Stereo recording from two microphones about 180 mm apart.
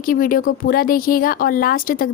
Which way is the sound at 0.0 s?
50° left (ahead or behind).